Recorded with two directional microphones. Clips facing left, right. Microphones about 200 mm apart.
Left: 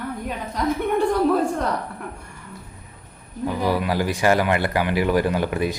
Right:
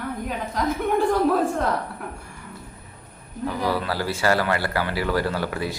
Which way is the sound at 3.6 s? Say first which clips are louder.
Left 4 dB; 15° left (ahead or behind).